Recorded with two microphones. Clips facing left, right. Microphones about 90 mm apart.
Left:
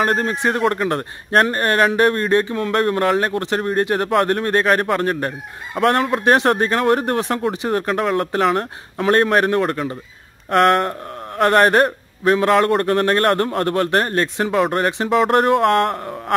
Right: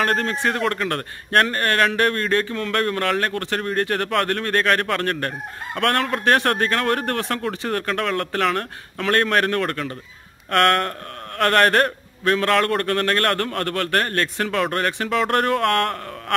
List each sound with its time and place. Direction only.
0.0 s speech: 15° left (ahead or behind)
14.5 s speech: 10° left (ahead or behind)
14.8 s speech: 20° left (ahead or behind)
15.0 s speech: 10° left (ahead or behind)